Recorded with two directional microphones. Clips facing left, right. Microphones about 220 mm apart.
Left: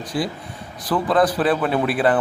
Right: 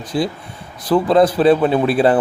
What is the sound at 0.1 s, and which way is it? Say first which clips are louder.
Speech: right 5 dB; 25° right (ahead or behind).